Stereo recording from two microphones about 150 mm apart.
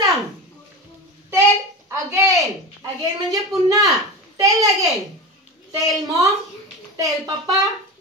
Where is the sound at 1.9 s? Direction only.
20° right (ahead or behind).